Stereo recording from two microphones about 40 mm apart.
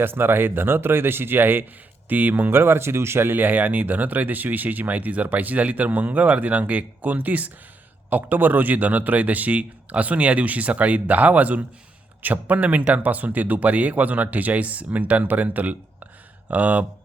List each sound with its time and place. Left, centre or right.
0.0 s speech: right
2.0 s speech: right
2.5 s a man's voice: right